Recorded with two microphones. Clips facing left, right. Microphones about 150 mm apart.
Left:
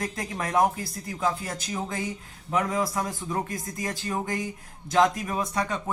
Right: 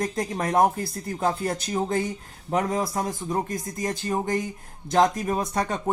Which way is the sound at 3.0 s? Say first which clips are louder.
Right 3 dB; 25° right (ahead or behind).